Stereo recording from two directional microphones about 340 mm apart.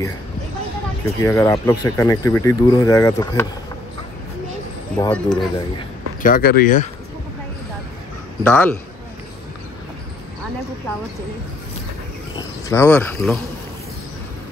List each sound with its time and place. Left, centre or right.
1.0 s speech: centre
4.9 s speech: centre
5.8 s speech: left
8.5 s speech: centre
12.6 s speech: centre